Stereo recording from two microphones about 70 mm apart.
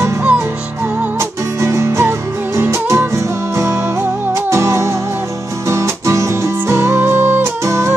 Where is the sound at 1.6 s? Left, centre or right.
Right.